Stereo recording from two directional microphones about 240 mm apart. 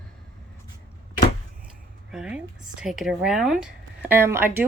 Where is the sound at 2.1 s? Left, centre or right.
Centre.